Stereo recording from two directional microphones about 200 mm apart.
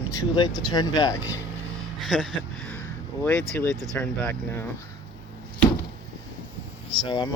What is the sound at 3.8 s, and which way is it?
Speech, 5° left (ahead or behind).